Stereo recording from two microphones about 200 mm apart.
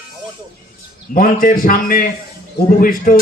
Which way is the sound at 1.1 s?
45° left (ahead or behind).